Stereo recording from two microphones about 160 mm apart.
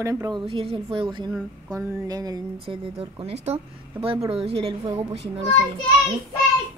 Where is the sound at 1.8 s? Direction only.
20° right (ahead or behind); by 5.2 s 35° right (ahead or behind).